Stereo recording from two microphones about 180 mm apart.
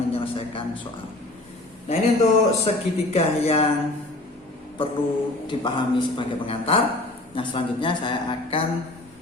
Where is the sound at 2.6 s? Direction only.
35° left (ahead or behind).